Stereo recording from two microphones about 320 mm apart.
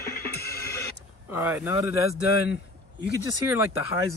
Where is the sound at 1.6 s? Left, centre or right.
Centre.